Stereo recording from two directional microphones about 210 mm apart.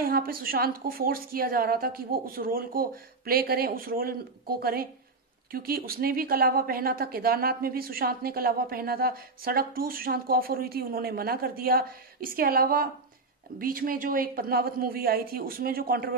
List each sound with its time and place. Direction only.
0.0 s speech: 45° right (ahead or behind)